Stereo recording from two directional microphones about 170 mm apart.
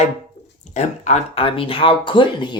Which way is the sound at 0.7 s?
40° left (ahead or behind).